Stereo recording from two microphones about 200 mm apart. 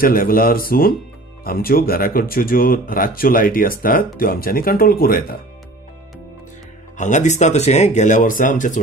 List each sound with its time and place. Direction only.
0.0 s speech: 45° left (ahead or behind)
7.0 s speech: 35° left (ahead or behind)